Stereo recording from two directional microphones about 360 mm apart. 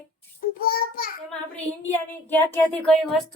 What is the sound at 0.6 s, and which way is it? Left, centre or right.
Speech, left.